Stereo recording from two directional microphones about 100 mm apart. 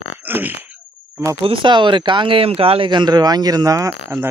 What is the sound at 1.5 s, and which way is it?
Speech, 50° right (ahead or behind).